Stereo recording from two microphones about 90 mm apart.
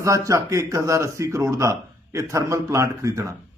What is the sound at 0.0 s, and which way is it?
A man's voice, 35° right (ahead or behind).